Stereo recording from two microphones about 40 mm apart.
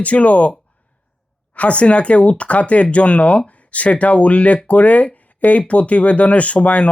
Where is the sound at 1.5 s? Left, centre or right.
Left.